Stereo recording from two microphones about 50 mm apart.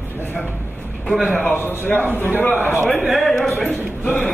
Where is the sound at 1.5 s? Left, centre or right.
Left.